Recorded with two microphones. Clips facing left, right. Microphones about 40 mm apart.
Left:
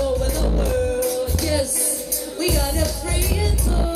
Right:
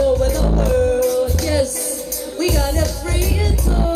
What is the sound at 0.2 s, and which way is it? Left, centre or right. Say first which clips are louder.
Music: right 5 dB; centre.